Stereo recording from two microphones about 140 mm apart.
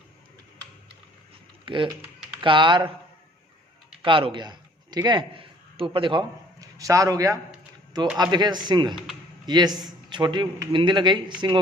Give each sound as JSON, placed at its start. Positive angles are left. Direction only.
{"t": 1.6, "sound": "a man's voice", "side_deg": -35}
{"t": 4.0, "sound": "a man's voice", "side_deg": -40}
{"t": 6.6, "sound": "a man's voice", "side_deg": -25}